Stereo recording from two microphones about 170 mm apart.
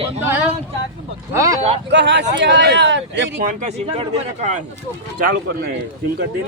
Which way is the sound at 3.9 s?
40° right (ahead or behind).